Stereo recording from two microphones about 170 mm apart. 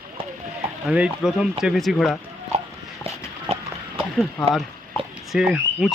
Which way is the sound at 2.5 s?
40° right (ahead or behind).